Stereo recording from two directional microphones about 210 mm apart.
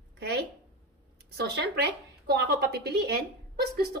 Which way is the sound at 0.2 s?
50° right (ahead or behind).